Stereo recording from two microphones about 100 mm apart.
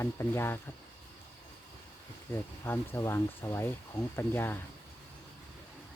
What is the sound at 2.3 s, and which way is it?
Speech, 25° left (ahead or behind).